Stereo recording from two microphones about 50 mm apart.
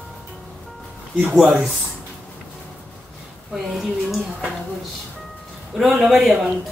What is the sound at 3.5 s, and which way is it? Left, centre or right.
Speech, centre.